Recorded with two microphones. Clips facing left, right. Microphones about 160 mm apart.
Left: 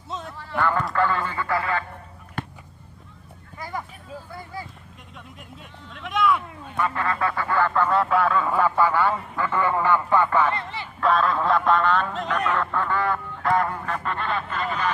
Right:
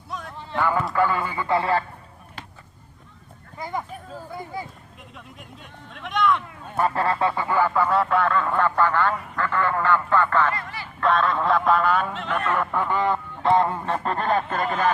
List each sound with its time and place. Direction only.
0.1 s a sound: 25° left (ahead or behind)
0.3 s a sound: 20° right (ahead or behind)
0.6 s speech: 5° right (ahead or behind)
1.5 s honk: 30° right (ahead or behind)
2.4 s a sound: 55° left (ahead or behind)
3.6 s speech: 20° right (ahead or behind)
4.3 s honk: 20° right (ahead or behind)
5.9 s speech: centre (ahead or behind)
6.7 s speech: 40° right (ahead or behind); by 10.5 s 15° left (ahead or behind)
10.5 s speech: 25° left (ahead or behind)
11.0 s speech: centre (ahead or behind)
12.5 s honk: 15° right (ahead or behind); by 14.9 s 45° right (ahead or behind)